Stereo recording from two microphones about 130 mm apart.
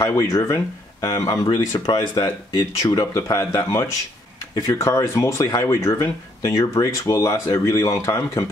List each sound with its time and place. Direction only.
0.0 s speech: 25° left (ahead or behind)